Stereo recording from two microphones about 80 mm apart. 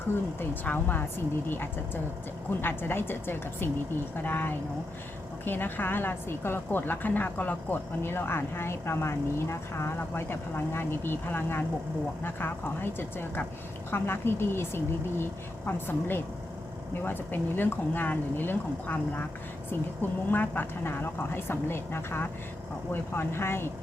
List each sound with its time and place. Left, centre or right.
0.3 s speech: left